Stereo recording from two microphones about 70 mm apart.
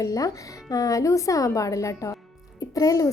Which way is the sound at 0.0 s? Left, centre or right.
Left.